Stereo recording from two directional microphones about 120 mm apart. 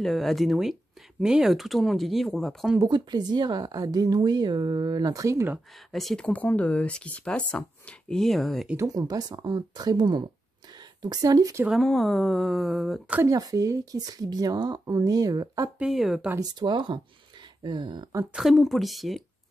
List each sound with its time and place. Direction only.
0.0 s speech: centre (ahead or behind)
2.9 s a woman's voice: 35° right (ahead or behind)
5.9 s speech: 5° left (ahead or behind)
8.7 s a woman's voice: 35° right (ahead or behind)
11.6 s speech: centre (ahead or behind)
13.3 s a woman's voice: 30° right (ahead or behind)
15.8 s speech: 5° right (ahead or behind)
16.3 s a woman's voice: 40° right (ahead or behind)
18.3 s speech: 5° right (ahead or behind)